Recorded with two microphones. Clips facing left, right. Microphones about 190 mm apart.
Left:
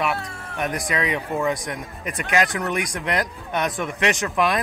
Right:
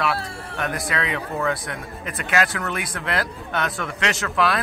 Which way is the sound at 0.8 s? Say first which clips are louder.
Left 2 dB; 15° left (ahead or behind).